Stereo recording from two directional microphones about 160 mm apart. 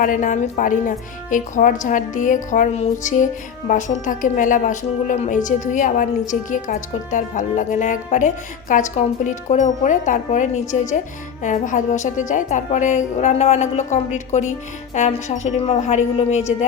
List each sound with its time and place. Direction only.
0.0 s a woman's voice: 55° left (ahead or behind)